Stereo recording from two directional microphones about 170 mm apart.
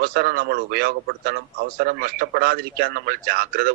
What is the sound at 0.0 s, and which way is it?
A man's voice, 65° right (ahead or behind).